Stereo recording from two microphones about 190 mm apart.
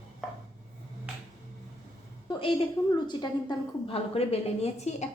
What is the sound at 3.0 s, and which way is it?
A woman's voice, 20° left (ahead or behind).